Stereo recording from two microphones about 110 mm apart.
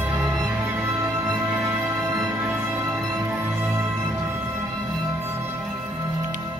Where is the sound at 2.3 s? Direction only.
15° right (ahead or behind).